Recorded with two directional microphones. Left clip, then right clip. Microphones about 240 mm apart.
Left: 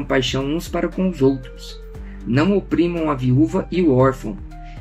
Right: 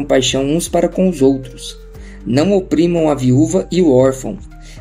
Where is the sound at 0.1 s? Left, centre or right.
Right.